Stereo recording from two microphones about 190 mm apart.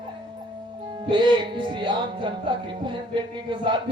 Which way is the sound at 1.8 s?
25° right (ahead or behind).